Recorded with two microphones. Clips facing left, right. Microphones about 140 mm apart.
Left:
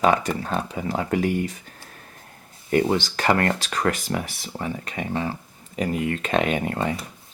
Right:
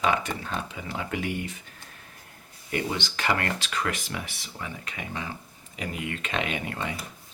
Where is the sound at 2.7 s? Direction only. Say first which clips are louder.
Left 9 dB; 40° left (ahead or behind).